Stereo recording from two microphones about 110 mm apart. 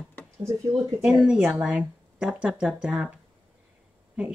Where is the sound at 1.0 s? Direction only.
5° right (ahead or behind).